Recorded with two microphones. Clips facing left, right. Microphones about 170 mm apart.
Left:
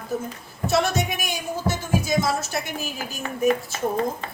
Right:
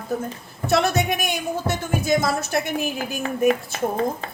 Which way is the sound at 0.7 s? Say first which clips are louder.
Right 3 dB; 60° right (ahead or behind).